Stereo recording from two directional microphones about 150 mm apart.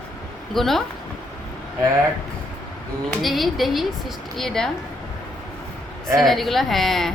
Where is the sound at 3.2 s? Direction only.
Centre (ahead or behind).